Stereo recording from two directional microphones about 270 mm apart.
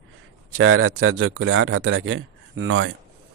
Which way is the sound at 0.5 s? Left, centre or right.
Right.